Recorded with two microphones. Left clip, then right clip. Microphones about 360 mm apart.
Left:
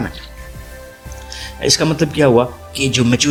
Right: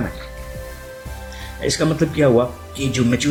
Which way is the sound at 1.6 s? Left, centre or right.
Left.